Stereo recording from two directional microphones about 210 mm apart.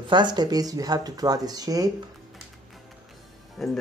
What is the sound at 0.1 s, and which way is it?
Speech, 20° right (ahead or behind).